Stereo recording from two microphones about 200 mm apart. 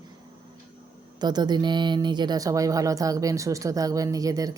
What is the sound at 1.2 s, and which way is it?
Speech, 20° right (ahead or behind).